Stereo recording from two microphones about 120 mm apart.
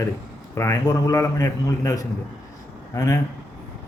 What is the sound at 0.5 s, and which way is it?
A man's voice, 25° left (ahead or behind).